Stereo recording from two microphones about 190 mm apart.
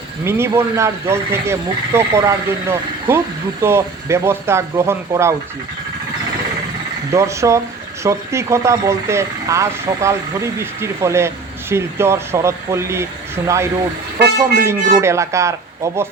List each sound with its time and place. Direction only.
0.3 s speech: 15° right (ahead or behind)
7.1 s speech: 15° right (ahead or behind)